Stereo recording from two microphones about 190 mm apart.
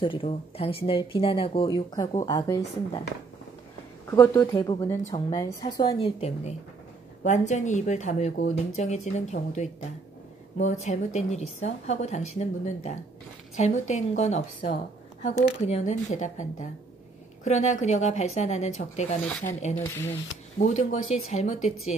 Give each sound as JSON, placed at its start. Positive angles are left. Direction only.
{"t": 0.0, "sound": "speech", "side_deg": 30}
{"t": 4.1, "sound": "a woman's voice", "side_deg": 15}
{"t": 19.8, "sound": "speech", "side_deg": 15}
{"t": 20.5, "sound": "a woman's voice", "side_deg": 40}